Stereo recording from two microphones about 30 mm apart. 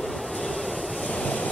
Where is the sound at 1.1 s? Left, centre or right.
Left.